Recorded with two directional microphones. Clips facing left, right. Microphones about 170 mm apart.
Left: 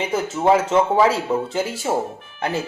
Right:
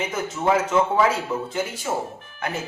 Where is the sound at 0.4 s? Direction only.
30° left (ahead or behind).